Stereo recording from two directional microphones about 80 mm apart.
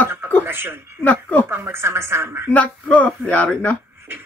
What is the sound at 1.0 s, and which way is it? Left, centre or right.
Speech, centre.